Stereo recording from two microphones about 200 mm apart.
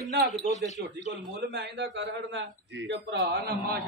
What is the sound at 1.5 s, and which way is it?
A man's voice, 60° right (ahead or behind).